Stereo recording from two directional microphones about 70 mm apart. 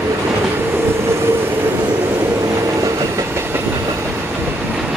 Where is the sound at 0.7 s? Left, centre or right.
Right.